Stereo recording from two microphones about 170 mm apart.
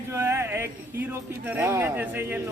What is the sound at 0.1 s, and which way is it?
Speech, 15° right (ahead or behind).